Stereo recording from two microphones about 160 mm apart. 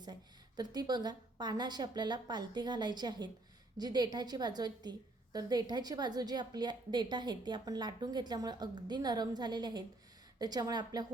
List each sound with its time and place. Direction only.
0.0 s a woman's voice: 25° right (ahead or behind)